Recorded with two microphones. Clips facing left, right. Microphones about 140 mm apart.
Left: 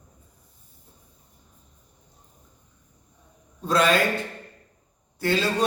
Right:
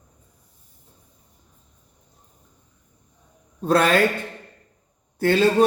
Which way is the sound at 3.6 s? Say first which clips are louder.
Right 3 dB; 50° right (ahead or behind).